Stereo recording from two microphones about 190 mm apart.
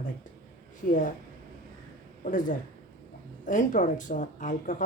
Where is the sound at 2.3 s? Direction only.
45° left (ahead or behind).